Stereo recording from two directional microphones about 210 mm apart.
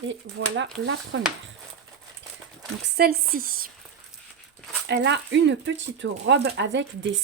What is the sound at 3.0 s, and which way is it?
Speech, 45° right (ahead or behind).